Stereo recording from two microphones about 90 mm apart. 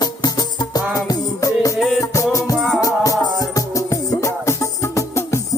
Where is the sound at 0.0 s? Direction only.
45° left (ahead or behind).